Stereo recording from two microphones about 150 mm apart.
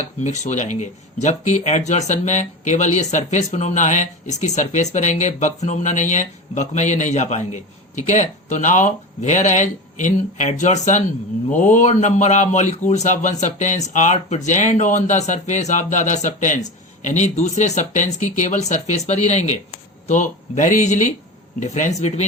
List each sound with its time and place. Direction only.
0.2 s speech: 50° left (ahead or behind)